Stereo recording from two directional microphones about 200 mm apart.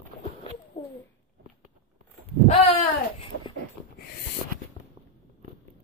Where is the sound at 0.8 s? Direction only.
25° left (ahead or behind).